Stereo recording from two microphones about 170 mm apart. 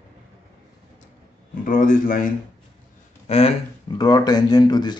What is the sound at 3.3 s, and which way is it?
Speech, 35° left (ahead or behind).